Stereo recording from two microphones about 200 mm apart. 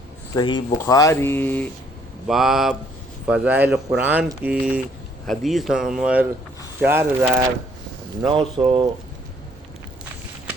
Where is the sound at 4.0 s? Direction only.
10° right (ahead or behind).